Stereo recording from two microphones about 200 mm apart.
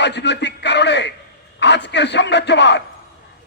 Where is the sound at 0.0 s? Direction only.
60° left (ahead or behind).